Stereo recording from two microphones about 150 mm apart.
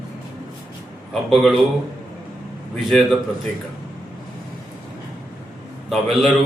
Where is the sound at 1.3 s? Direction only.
Centre (ahead or behind).